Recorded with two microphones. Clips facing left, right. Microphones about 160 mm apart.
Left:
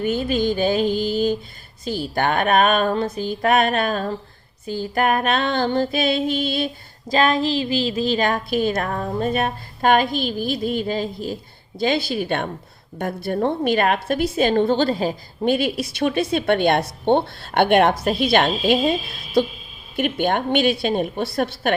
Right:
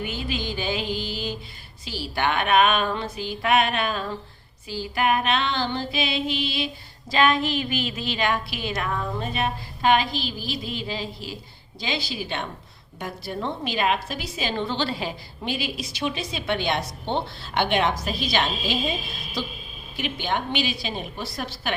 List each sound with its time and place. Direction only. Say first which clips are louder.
0.0 s a woman's voice: left 9 dB; 45° left (ahead or behind)
7.1 s a woman's voice: left 3 dB; 40° left (ahead or behind); by 21.8 s 55° left (ahead or behind)